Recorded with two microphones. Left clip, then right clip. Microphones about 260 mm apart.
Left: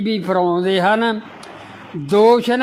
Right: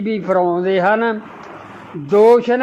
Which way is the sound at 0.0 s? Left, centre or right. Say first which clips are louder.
Right 1 dB; left.